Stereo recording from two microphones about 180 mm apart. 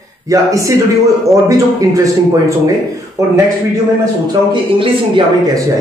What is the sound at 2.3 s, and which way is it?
Speech, 15° right (ahead or behind).